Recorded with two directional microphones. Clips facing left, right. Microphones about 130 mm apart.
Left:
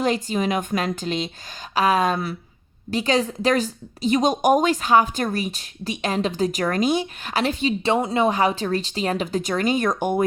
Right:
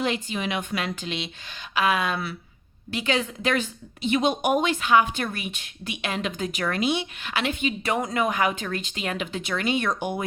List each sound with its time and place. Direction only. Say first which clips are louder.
0.0 s a woman's voice: left 5 dB; 40° left (ahead or behind)